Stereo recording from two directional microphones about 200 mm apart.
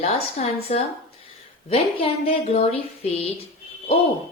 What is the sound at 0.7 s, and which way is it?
Speech, 30° left (ahead or behind).